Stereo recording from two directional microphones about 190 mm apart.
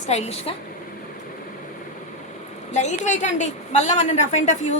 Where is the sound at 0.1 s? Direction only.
35° left (ahead or behind).